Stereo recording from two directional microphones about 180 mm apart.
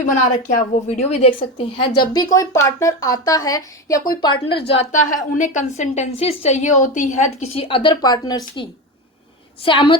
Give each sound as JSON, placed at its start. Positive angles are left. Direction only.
{"t": 0.4, "sound": "speech", "side_deg": 40}
{"t": 9.6, "sound": "speech", "side_deg": 30}